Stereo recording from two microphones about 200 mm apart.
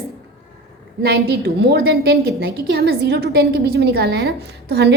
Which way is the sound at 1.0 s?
50° right (ahead or behind).